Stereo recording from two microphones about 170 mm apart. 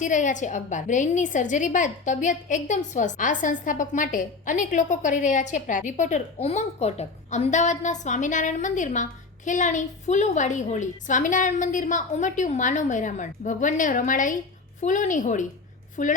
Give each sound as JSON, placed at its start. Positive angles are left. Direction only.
{"t": 0.0, "sound": "a woman's voice", "side_deg": 50}